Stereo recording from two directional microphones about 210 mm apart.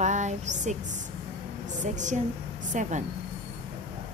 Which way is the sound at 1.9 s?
35° right (ahead or behind).